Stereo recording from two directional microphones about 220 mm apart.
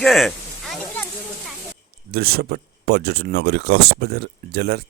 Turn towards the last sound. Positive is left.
turn(degrees=-45)  # may be behind; listen again after turning